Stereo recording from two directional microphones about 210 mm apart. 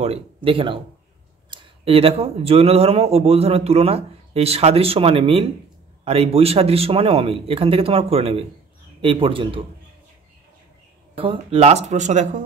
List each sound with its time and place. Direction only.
0.0 s speech: 30° right (ahead or behind)
11.1 s speech: 25° right (ahead or behind)